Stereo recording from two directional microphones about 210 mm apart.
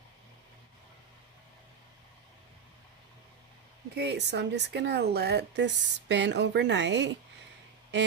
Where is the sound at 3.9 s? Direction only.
50° right (ahead or behind).